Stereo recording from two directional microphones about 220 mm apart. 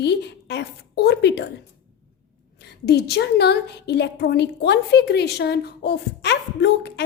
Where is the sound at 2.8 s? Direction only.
45° left (ahead or behind).